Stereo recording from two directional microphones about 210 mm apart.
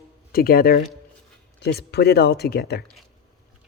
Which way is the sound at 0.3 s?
45° left (ahead or behind).